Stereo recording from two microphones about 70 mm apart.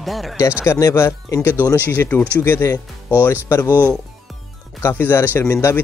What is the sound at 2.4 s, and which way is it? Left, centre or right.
A man's voice, left.